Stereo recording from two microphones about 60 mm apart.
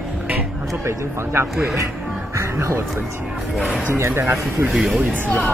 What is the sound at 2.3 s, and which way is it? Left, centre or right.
Music, right.